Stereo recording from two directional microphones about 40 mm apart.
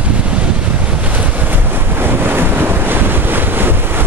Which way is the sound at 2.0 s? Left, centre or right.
Right.